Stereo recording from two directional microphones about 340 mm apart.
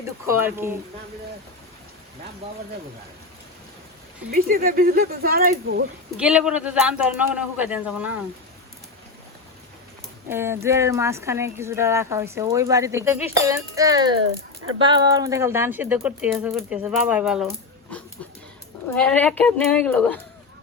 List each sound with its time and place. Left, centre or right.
0.3 s speech: centre
4.3 s speech: right
6.1 s a man's voice: centre
10.2 s a man's voice: centre
18.9 s a man's voice: centre